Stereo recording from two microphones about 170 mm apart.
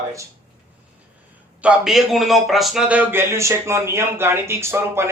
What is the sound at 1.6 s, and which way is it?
A man's voice, 5° right (ahead or behind).